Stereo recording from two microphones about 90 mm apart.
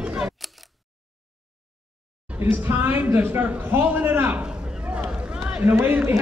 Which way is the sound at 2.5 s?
25° right (ahead or behind).